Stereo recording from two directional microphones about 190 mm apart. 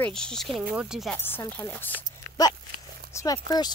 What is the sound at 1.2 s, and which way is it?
Speech, 10° left (ahead or behind).